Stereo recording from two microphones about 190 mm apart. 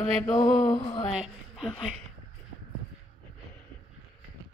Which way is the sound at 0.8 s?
25° left (ahead or behind).